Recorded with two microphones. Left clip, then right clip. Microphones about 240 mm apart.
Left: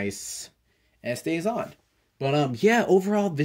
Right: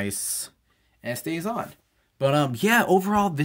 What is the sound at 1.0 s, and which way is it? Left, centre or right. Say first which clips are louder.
Speech: left 2 dB; centre.